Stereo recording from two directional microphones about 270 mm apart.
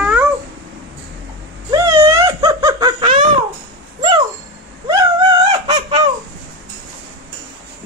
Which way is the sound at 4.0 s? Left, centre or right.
Centre.